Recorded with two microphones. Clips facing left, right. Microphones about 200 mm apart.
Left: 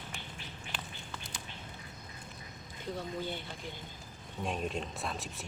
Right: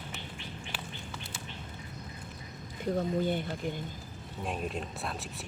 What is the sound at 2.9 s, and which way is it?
Speech, 50° right (ahead or behind).